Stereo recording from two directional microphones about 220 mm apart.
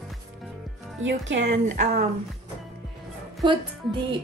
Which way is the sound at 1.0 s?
55° right (ahead or behind).